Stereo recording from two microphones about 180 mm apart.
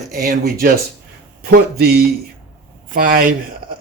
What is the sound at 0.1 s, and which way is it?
A man's voice, 55° right (ahead or behind).